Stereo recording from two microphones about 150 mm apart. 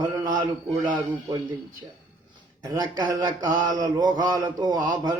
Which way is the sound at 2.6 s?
25° right (ahead or behind).